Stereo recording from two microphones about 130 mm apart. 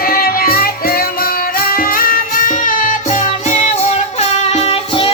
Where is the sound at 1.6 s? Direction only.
90° left.